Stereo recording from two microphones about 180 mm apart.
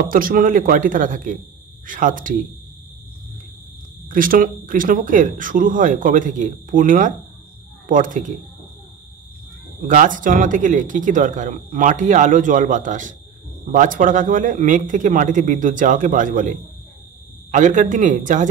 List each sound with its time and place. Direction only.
0.1 s speech: 50° right (ahead or behind)
4.1 s speech: 50° right (ahead or behind)
9.8 s speech: 45° right (ahead or behind)